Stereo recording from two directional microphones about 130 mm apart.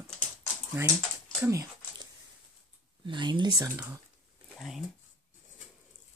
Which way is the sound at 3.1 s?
35° right (ahead or behind).